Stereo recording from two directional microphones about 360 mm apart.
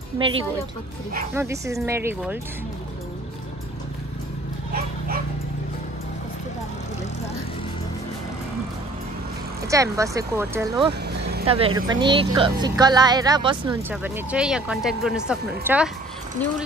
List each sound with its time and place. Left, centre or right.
0.2 s speech: centre
9.7 s speech: centre